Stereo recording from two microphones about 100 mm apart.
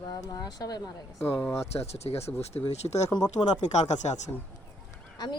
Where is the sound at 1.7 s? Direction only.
90° left.